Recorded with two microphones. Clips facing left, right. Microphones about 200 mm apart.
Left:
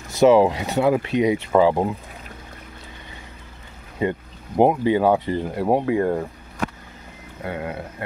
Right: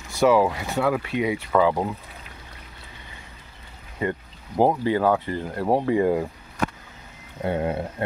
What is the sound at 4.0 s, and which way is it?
Speech, 20° left (ahead or behind).